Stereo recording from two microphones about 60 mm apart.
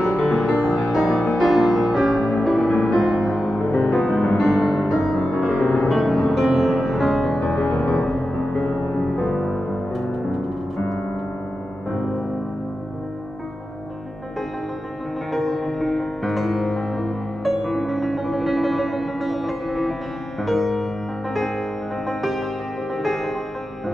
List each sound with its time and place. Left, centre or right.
0.0 s music: centre
7.2 s music: centre
15.3 s music: centre
23.0 s music: centre